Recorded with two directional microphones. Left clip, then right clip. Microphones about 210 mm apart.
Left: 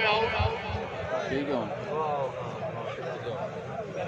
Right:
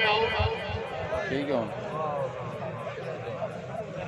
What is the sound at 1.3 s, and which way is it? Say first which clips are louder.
Speech: right 3 dB; 30° right (ahead or behind).